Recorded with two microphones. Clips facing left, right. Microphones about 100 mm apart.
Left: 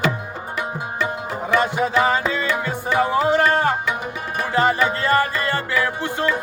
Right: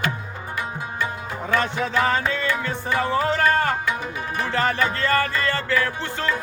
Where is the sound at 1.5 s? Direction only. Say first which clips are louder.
Left 4 dB; 15° left (ahead or behind).